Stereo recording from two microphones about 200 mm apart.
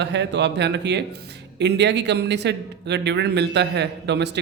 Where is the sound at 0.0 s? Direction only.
60° right (ahead or behind).